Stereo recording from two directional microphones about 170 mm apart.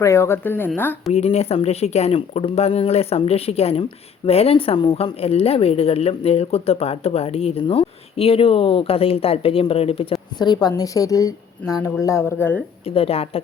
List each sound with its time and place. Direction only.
0.0 s speech: 15° left (ahead or behind)
1.1 s speech: 35° left (ahead or behind); by 12.6 s 15° left (ahead or behind)
12.8 s speech: 35° left (ahead or behind)